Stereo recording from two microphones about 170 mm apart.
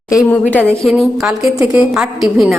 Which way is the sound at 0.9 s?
Centre (ahead or behind).